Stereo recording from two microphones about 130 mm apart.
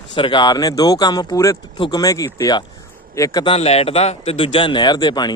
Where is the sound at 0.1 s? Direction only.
40° left (ahead or behind).